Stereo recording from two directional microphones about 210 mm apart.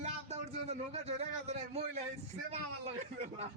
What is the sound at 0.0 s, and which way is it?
Speech, 30° right (ahead or behind).